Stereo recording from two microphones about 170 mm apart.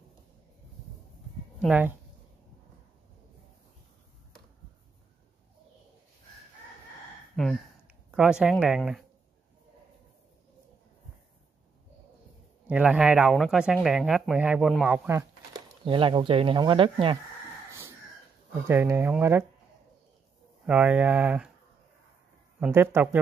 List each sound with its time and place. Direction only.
1.6 s speech: 10° right (ahead or behind)
7.4 s speech: 5° left (ahead or behind)
12.6 s speech: 5° right (ahead or behind)
15.8 s speech: 30° right (ahead or behind)
18.7 s speech: 15° right (ahead or behind)
20.6 s speech: 10° right (ahead or behind)
22.6 s speech: 15° right (ahead or behind)